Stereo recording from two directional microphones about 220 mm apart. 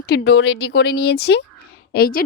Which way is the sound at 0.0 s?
45° left (ahead or behind).